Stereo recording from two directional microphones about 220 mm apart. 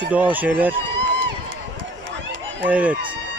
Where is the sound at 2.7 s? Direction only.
5° right (ahead or behind).